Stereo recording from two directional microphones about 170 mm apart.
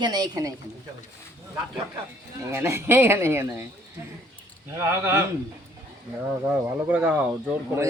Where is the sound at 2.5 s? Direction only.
15° right (ahead or behind).